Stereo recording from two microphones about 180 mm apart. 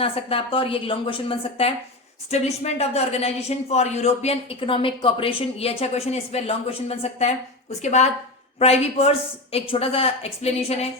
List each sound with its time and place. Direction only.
0.0 s speech: 30° left (ahead or behind)